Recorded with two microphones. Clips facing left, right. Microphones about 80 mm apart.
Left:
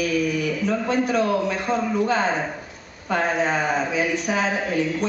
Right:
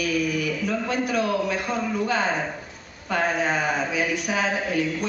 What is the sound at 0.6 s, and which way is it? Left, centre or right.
Speech, left.